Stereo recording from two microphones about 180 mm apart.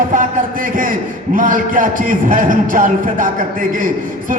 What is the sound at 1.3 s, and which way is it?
A man's voice, 45° right (ahead or behind).